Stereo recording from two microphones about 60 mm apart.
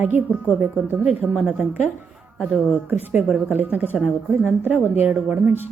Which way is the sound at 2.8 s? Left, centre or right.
Right.